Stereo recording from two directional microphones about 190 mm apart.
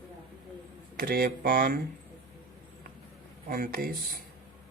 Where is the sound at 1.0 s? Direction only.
50° right (ahead or behind).